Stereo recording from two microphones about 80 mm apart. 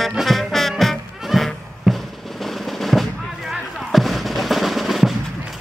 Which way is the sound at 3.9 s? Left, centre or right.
Centre.